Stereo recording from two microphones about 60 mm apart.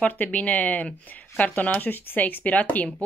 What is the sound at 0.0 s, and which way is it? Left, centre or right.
Speech, left.